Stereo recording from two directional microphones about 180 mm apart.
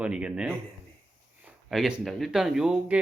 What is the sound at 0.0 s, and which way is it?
Speech, 5° right (ahead or behind).